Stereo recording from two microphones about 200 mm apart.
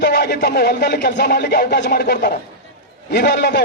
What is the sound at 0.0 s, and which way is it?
A man's voice, 50° left (ahead or behind).